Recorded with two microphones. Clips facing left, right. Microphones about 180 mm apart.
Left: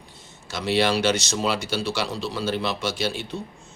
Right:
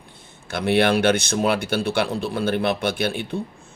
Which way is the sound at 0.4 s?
55° right (ahead or behind).